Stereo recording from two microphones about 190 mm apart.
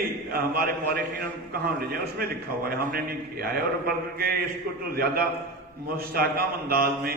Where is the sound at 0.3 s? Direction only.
50° right (ahead or behind).